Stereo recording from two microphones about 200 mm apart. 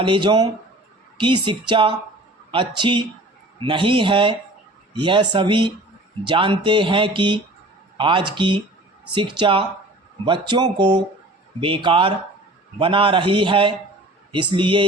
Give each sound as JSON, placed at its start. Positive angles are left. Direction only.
{"t": 0.0, "sound": "speech", "side_deg": -25}